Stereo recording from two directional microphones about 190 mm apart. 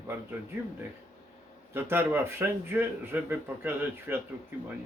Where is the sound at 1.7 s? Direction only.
10° right (ahead or behind).